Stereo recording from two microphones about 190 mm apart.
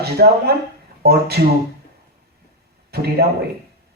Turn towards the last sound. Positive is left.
turn(degrees=-55)  # may be behind; listen again after turning